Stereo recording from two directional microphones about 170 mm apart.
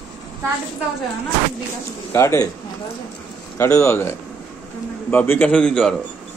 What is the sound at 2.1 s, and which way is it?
Speech, 20° left (ahead or behind).